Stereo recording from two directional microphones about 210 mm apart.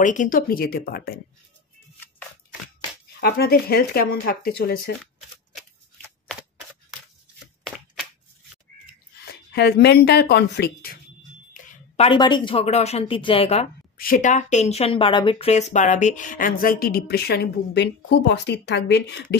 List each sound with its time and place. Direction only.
0.0 s speech: 35° left (ahead or behind)
3.2 s speech: 45° left (ahead or behind)
9.3 s speech: 50° left (ahead or behind)
11.5 s speech: 25° left (ahead or behind)
13.9 s speech: 40° left (ahead or behind)